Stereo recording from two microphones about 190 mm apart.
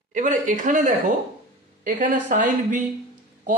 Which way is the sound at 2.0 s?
45° right (ahead or behind).